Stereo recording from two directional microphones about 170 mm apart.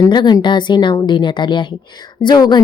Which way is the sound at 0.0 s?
25° left (ahead or behind).